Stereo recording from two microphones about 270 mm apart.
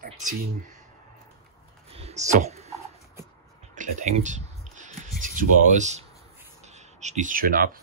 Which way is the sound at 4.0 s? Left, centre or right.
Right.